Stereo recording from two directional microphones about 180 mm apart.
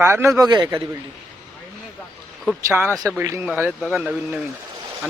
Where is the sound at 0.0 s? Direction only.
15° right (ahead or behind).